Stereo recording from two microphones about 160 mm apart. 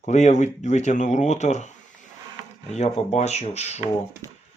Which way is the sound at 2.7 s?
45° left (ahead or behind).